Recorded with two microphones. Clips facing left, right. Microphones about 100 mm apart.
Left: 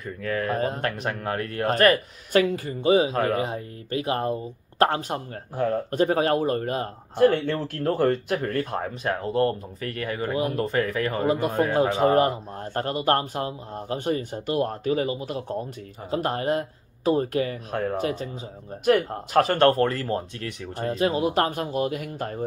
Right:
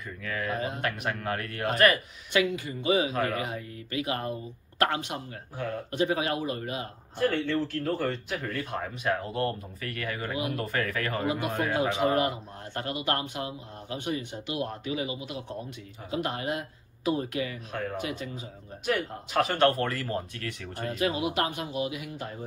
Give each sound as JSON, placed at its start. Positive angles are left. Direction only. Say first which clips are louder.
{"t": 0.2, "sound": "speech", "louder": "left 6 dB", "side_deg": 40}
{"t": 8.7, "sound": "speech", "louder": "left 2 dB", "side_deg": 35}
{"t": 11.2, "sound": "speech", "louder": "left 7 dB", "side_deg": 35}